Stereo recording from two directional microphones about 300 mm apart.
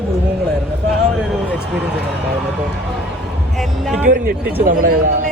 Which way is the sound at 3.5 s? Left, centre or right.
Centre.